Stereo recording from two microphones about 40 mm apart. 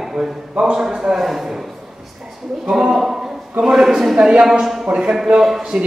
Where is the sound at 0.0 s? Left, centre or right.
Centre.